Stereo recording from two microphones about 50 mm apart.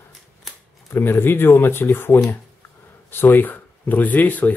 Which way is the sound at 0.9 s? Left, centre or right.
Left.